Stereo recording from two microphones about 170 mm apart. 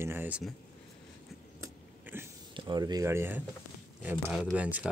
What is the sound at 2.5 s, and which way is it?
Speech, 25° right (ahead or behind).